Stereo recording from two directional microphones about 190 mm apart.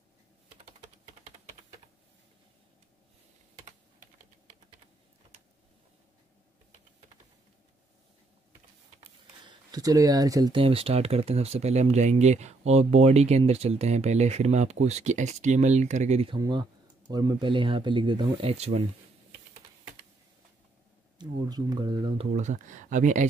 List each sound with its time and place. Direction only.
0.7 s typing: 35° right (ahead or behind)
9.0 s speech: 20° right (ahead or behind)
16.3 s speech: 20° right (ahead or behind)
21.2 s speech: 20° right (ahead or behind)
22.3 s speech: 40° right (ahead or behind)